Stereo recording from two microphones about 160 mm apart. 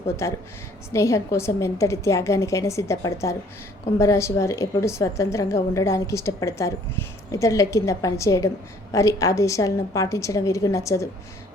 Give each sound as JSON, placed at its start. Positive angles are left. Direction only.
{"t": 0.2, "sound": "a woman's voice", "side_deg": 20}